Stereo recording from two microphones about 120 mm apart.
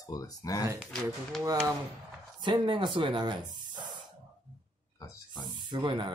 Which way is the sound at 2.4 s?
40° right (ahead or behind).